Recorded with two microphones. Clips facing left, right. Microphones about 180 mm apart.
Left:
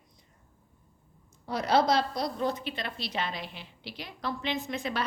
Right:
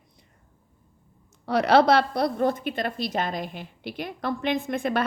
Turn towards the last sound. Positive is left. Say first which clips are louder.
# right 7 dB
turn(degrees=-55)  # may be behind; listen again after turning